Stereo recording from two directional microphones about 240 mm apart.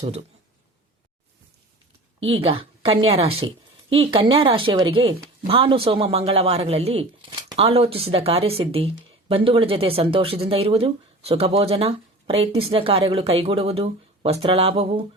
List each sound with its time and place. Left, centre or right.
0.0 s speech: right
2.2 s a woman's voice: right